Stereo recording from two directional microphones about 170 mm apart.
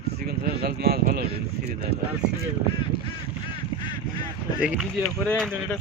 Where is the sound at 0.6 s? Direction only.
65° right (ahead or behind).